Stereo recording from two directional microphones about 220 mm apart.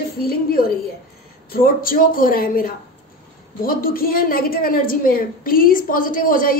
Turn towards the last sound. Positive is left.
turn(degrees=40)  # may be behind; listen again after turning